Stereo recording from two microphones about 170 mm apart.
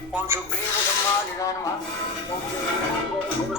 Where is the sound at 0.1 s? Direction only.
10° right (ahead or behind).